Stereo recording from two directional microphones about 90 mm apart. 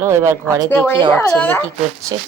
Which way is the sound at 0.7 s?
20° left (ahead or behind).